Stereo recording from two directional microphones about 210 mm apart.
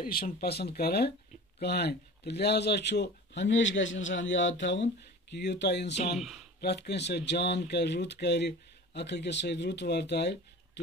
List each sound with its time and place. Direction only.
0.0 s speech: 45° left (ahead or behind)